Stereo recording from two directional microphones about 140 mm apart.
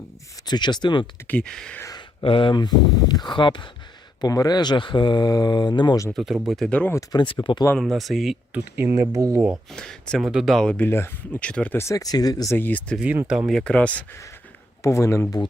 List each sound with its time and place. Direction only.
0.4 s speech: 30° left (ahead or behind)
1.3 s speech: 5° left (ahead or behind)
1.8 s a sound: 25° left (ahead or behind)
2.2 s speech: 40° left (ahead or behind)
6.1 s speech: centre (ahead or behind)
6.7 s speech: 10° left (ahead or behind)
6.9 s speech: 30° left (ahead or behind)
7.8 s speech: centre (ahead or behind)
8.5 s speech: 15° right (ahead or behind)
9.7 s speech: 5° left (ahead or behind)
10.8 s speech: 15° left (ahead or behind)
12.5 s speech: 15° left (ahead or behind)
13.0 s speech: 10° right (ahead or behind); by 14.2 s 10° left (ahead or behind)
14.8 s speech: 20° left (ahead or behind)